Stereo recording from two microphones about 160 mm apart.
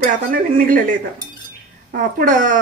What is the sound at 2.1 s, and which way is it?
Speech, 55° right (ahead or behind).